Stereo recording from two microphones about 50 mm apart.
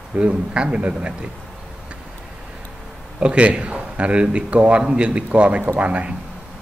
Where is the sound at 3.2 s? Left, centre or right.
Right.